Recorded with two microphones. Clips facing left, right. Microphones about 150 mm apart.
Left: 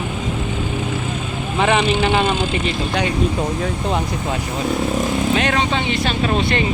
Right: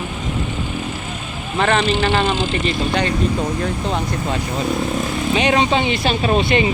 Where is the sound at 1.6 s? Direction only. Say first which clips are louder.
Even; 10° left (ahead or behind).